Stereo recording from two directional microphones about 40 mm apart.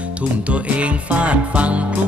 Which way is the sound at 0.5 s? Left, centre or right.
Right.